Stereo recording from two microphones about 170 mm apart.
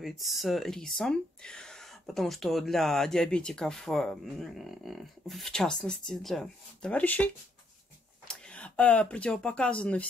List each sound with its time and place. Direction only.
0.0 s speech: centre (ahead or behind)
8.3 s speech: 5° left (ahead or behind)